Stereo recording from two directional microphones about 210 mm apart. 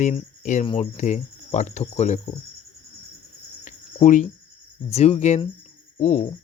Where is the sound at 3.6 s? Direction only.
35° left (ahead or behind).